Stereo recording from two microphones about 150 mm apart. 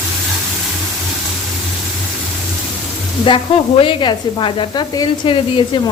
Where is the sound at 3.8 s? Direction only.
30° left (ahead or behind).